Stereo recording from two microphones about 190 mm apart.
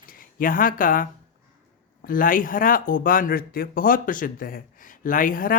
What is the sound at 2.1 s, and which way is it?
Speech, 45° left (ahead or behind).